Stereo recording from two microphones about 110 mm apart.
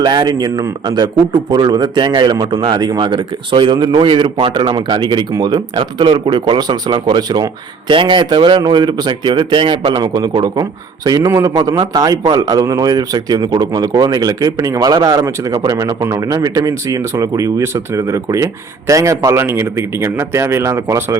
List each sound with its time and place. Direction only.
0.0 s speech: 40° right (ahead or behind)